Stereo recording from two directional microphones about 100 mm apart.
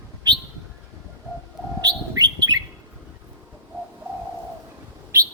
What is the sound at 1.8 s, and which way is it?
Bird, 40° right (ahead or behind).